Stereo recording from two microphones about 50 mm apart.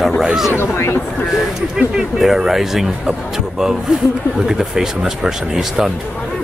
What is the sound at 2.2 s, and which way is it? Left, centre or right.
Speech, centre.